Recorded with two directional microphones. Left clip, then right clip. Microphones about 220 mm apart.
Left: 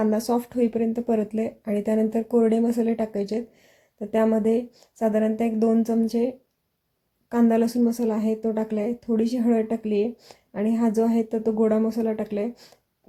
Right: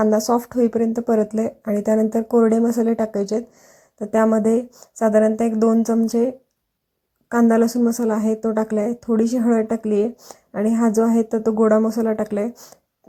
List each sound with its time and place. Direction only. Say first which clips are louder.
0.3 s a woman's voice: right 5 dB; 15° right (ahead or behind)
2.6 s speech: right 4 dB; centre (ahead or behind)
2.8 s a woman's voice: right 5 dB; 15° right (ahead or behind)